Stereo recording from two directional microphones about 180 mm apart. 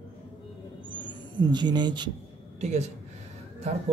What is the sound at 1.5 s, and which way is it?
Speech, 25° right (ahead or behind).